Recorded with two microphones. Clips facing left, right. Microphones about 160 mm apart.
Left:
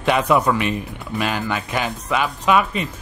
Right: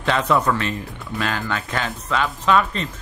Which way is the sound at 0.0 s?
15° left (ahead or behind).